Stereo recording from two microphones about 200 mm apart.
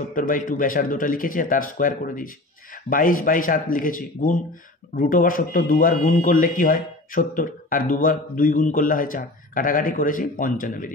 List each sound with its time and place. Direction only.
0.1 s speech: 40° left (ahead or behind)